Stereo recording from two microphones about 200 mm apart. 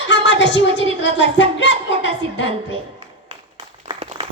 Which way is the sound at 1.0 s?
65° left (ahead or behind).